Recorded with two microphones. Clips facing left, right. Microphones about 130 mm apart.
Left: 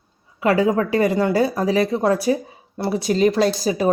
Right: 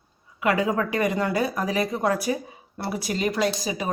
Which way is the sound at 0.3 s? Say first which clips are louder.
Left 5 dB; 30° left (ahead or behind).